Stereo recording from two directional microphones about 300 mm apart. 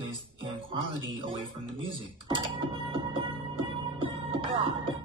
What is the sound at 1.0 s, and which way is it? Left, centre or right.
Speech, centre.